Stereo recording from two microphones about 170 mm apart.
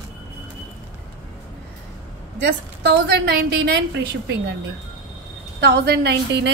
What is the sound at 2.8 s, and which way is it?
Speech, 70° right (ahead or behind).